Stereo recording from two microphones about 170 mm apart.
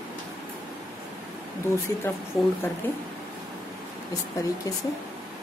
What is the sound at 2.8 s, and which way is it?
Speech, 10° left (ahead or behind).